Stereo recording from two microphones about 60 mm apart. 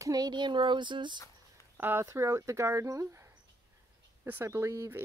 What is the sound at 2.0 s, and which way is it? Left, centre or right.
Speech, right.